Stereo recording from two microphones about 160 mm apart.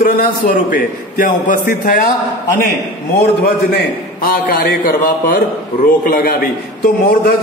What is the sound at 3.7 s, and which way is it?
A man's voice, 65° left (ahead or behind).